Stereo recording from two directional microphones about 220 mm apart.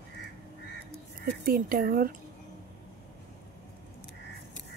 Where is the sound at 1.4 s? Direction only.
40° right (ahead or behind).